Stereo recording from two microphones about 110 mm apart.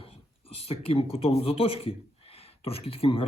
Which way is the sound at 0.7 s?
60° left (ahead or behind).